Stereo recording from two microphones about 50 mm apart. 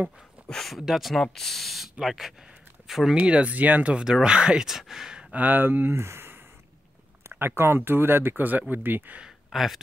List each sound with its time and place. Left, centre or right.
0.5 s speech: centre
1.2 s speech: centre
3.2 s speech: right
4.0 s speech: centre
5.3 s speech: right
9.5 s speech: centre